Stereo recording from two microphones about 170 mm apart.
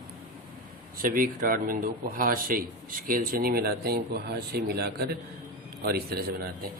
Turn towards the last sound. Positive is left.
turn(degrees=-65)  # may be behind; listen again after turning